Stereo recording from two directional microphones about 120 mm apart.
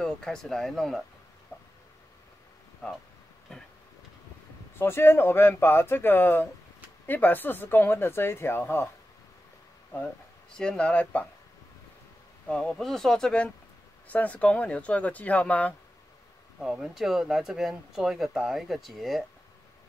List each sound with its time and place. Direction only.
0.0 s speech: 5° left (ahead or behind)
4.7 s speech: 20° left (ahead or behind)
10.5 s speech: 5° left (ahead or behind)
12.4 s speech: 5° left (ahead or behind)
16.7 s speech: 5° right (ahead or behind)